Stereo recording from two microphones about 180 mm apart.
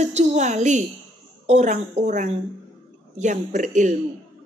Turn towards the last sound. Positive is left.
turn(degrees=-45)  # may be behind; listen again after turning